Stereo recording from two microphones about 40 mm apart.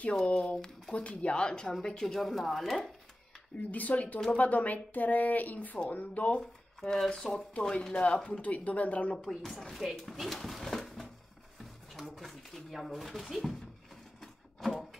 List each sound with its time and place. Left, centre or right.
0.1 s speech: centre
0.9 s speech: left; by 2.9 s centre
3.7 s a woman's voice: left
6.8 s speech: centre
7.9 s speech: left
8.3 s speech: left
9.3 s speech: centre
12.2 s speech: centre